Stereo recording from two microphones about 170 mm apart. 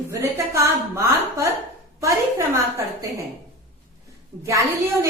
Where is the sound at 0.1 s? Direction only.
15° right (ahead or behind).